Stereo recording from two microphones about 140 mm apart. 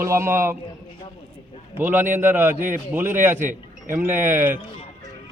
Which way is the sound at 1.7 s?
15° right (ahead or behind).